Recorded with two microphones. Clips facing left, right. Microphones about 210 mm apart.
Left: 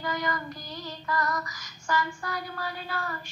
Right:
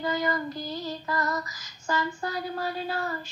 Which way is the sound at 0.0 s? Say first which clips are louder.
Right 4 dB; 25° right (ahead or behind).